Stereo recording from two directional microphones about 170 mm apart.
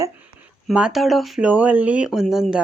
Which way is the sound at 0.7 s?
5° right (ahead or behind).